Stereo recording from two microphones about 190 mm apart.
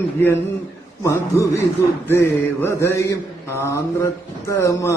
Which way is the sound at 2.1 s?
15° left (ahead or behind).